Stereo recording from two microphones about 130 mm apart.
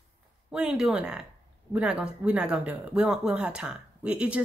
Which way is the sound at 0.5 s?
5° right (ahead or behind).